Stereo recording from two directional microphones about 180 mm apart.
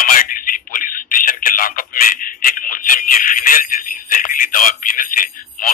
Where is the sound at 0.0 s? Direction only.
50° left (ahead or behind).